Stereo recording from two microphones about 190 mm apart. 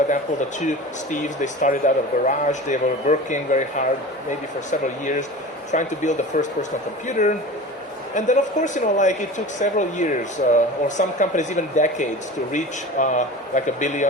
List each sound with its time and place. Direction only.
0.1 s speech: 40° left (ahead or behind)